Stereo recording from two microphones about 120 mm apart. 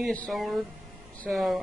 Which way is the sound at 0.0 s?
10° left (ahead or behind).